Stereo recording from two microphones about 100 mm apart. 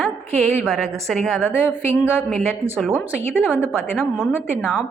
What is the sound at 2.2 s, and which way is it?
Speech, 5° left (ahead or behind).